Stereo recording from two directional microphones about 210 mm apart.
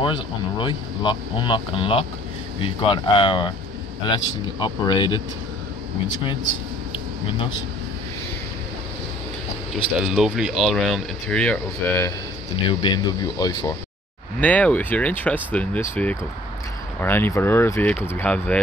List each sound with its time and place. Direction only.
0.0 s speech: 20° left (ahead or behind)
4.6 s speech: 20° left (ahead or behind)
9.9 s speech: centre (ahead or behind)
12.6 s speech: 20° left (ahead or behind)
14.4 s speech: 5° left (ahead or behind)